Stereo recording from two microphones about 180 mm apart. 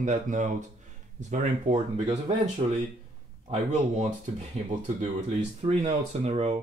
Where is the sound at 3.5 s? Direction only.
40° right (ahead or behind).